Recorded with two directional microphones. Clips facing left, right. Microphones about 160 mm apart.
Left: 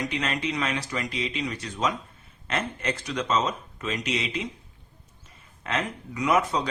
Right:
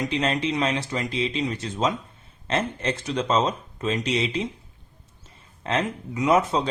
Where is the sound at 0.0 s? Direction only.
25° right (ahead or behind).